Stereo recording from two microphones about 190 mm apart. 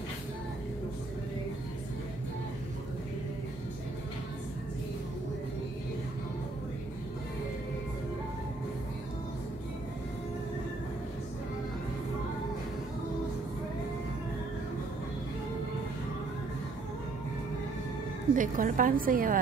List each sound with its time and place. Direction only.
18.3 s a woman's voice: 45° right (ahead or behind)